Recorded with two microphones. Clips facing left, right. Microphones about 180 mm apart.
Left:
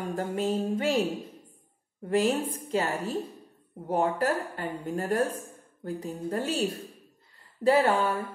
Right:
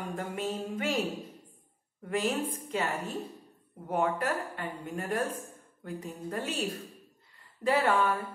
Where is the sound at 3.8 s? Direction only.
35° left (ahead or behind).